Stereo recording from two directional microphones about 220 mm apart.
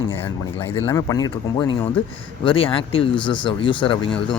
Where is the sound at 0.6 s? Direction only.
10° left (ahead or behind).